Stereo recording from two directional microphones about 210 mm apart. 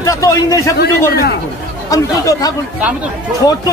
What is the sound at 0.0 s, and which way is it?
Speech, 15° left (ahead or behind).